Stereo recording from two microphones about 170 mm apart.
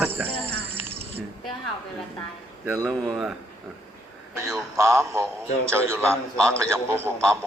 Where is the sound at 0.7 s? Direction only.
35° right (ahead or behind).